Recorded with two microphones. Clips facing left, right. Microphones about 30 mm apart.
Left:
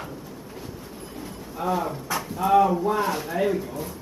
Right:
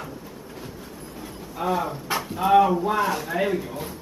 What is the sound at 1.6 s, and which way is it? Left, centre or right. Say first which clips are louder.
Speech: right 1 dB; right.